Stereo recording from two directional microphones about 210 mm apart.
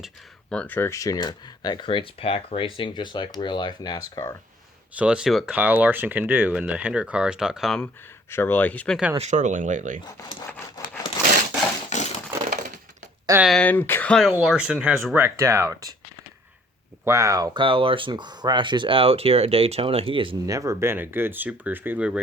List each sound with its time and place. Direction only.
0.5 s speech: 5° left (ahead or behind)
4.9 s speech: 5° right (ahead or behind)
9.1 s speech: 35° right (ahead or behind)
11.9 s a sound: 35° left (ahead or behind)
13.2 s speech: 10° right (ahead or behind)
13.5 s speech: 5° left (ahead or behind); by 16.0 s 15° right (ahead or behind)
17.1 s speech: 15° right (ahead or behind)